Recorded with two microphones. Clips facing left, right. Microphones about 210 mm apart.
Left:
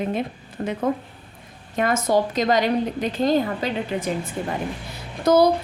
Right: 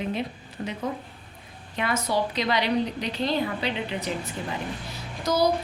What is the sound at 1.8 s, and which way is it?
A woman's voice, 45° left (ahead or behind).